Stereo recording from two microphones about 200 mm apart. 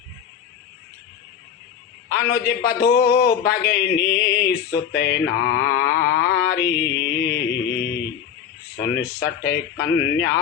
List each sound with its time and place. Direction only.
2.1 s a man's voice: 50° left (ahead or behind)
5.4 s a sound: 50° left (ahead or behind)
8.7 s a man's voice: 50° left (ahead or behind)